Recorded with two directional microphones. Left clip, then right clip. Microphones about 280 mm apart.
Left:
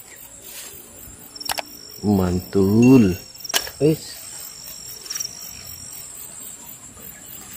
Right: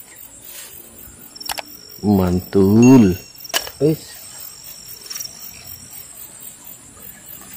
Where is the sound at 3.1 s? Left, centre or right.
Centre.